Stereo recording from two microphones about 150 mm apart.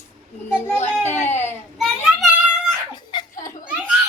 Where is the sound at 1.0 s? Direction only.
15° left (ahead or behind).